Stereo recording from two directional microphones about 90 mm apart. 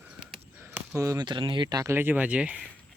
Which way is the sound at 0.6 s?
30° right (ahead or behind).